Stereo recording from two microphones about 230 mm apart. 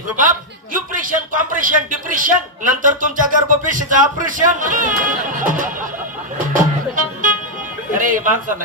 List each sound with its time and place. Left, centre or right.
0.7 s speech: right
6.4 s music: right
7.9 s speech: right